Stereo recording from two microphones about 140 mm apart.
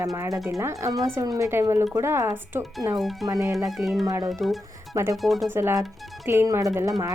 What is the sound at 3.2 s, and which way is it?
Speech, 25° right (ahead or behind).